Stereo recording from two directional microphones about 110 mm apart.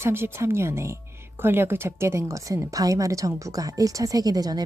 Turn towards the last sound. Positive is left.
turn(degrees=-35)  # may be behind; listen again after turning